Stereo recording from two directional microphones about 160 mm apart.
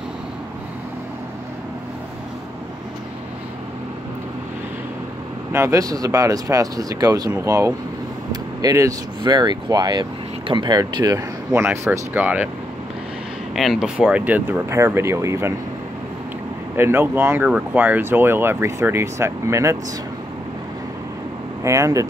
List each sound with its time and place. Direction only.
5.5 s speech: 20° right (ahead or behind)
13.6 s speech: centre (ahead or behind); by 15.5 s 20° right (ahead or behind)
16.7 s speech: 15° right (ahead or behind)
21.6 s speech: 20° right (ahead or behind)